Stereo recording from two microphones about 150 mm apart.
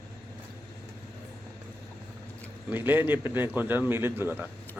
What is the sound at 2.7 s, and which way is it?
A man's voice, 15° right (ahead or behind).